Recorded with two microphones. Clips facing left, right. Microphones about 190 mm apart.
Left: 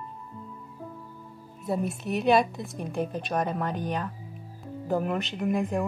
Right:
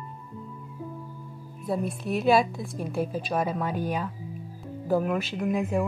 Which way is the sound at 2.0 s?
Centre (ahead or behind).